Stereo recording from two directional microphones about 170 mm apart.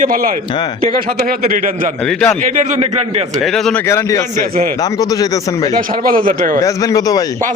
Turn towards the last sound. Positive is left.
turn(degrees=20)  # may be behind; listen again after turning